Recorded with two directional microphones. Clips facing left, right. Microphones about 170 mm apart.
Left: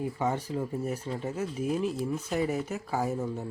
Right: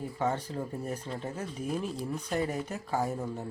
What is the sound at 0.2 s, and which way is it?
Speech, 10° left (ahead or behind).